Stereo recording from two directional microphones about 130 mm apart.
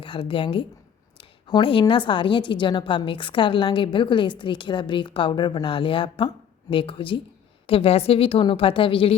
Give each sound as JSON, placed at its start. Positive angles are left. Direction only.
{"t": 0.0, "sound": "a woman's voice", "side_deg": 45}
{"t": 1.2, "sound": "a sound", "side_deg": 40}
{"t": 1.8, "sound": "a woman's voice", "side_deg": 40}